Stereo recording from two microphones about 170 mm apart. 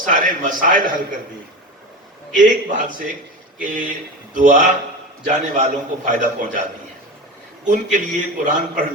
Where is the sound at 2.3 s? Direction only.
50° right (ahead or behind).